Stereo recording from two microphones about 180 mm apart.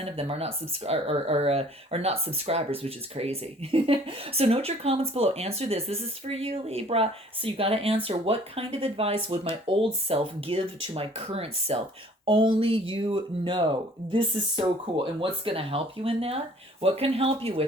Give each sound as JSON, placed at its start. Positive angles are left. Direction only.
{"t": 0.0, "sound": "speech", "side_deg": -35}